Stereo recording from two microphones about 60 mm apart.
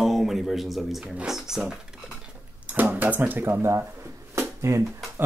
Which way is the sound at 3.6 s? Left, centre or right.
Right.